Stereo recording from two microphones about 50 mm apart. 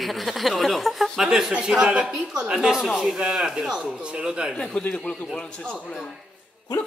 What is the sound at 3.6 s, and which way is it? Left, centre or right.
Speech, centre.